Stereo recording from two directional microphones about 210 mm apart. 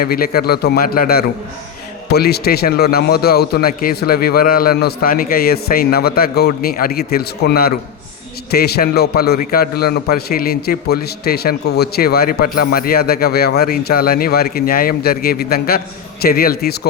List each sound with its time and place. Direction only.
0.0 s a man's voice: 45° left (ahead or behind)